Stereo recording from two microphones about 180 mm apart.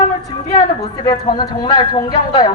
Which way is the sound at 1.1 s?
25° left (ahead or behind).